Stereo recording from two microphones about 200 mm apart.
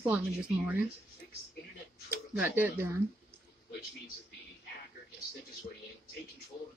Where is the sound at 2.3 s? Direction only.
10° right (ahead or behind).